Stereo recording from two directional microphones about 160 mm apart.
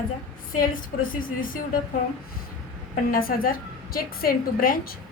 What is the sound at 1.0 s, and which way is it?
Speech, 60° left (ahead or behind).